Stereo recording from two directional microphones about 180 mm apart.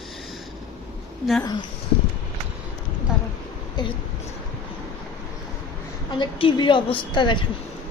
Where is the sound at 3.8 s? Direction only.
25° left (ahead or behind).